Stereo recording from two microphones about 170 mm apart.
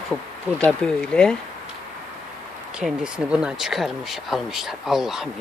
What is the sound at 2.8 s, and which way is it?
Speech, 5° right (ahead or behind).